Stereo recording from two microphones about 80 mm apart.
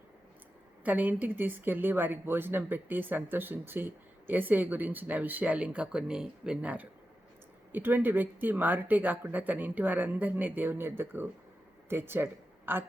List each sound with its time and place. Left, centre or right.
0.9 s speech: right